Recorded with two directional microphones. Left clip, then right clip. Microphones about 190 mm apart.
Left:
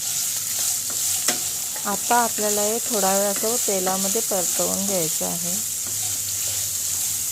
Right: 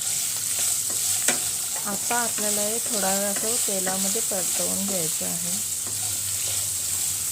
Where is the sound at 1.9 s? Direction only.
10° left (ahead or behind).